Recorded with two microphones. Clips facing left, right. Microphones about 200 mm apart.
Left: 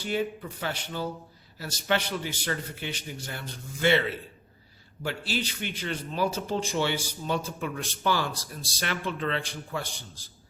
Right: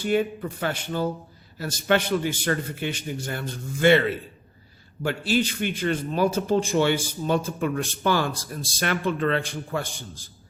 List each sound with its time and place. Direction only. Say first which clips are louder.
0.0 s a man's voice: right 6 dB; 50° right (ahead or behind)
5.0 s a man's voice: right 8 dB; 50° right (ahead or behind)